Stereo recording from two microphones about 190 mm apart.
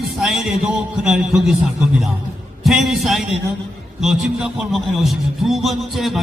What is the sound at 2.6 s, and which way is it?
A man's voice, centre (ahead or behind).